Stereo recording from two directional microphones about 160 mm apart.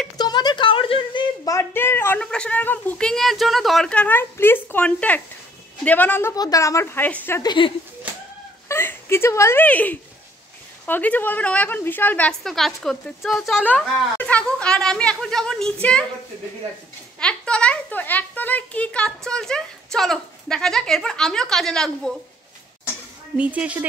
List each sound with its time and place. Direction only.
0.2 s a woman's voice: 25° left (ahead or behind)
6.3 s a woman's voice: 25° left (ahead or behind)
7.4 s speech: 30° left (ahead or behind)
8.6 s a woman's voice: 15° left (ahead or behind)
17.2 s a child's voice: 5° left (ahead or behind)
23.3 s speech: 10° right (ahead or behind)